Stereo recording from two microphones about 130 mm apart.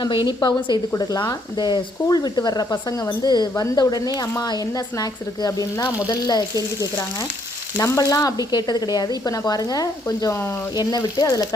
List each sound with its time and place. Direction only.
0.0 s speech: 35° left (ahead or behind)